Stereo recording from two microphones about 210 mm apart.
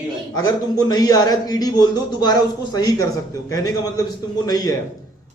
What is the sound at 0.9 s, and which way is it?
A man's voice, 15° left (ahead or behind).